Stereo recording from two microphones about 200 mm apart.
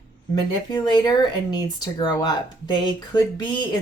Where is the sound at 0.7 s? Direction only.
20° left (ahead or behind).